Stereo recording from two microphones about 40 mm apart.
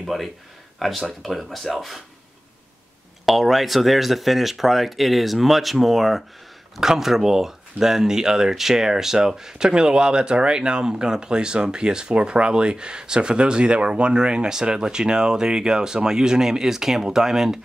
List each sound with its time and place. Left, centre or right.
0.0 s a man's voice: centre
3.3 s speech: centre